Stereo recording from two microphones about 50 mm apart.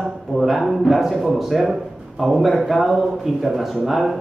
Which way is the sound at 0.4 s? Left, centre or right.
Centre.